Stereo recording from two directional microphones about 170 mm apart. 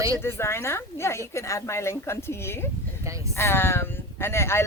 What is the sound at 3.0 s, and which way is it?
Speech, 20° right (ahead or behind).